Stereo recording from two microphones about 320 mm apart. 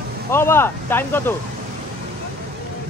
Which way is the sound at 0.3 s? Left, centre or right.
Centre.